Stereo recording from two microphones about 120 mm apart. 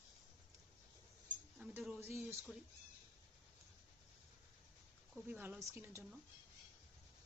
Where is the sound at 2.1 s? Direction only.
25° right (ahead or behind).